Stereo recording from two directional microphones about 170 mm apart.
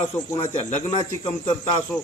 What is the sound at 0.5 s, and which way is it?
Speech, 35° left (ahead or behind).